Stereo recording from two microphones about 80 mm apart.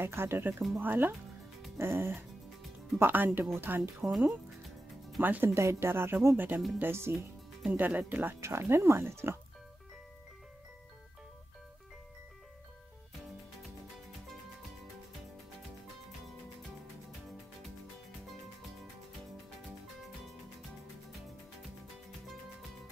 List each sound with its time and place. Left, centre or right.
0.0 s speech: right
4.0 s music: centre
5.2 s speech: right
7.7 s speech: right
8.3 s speech: right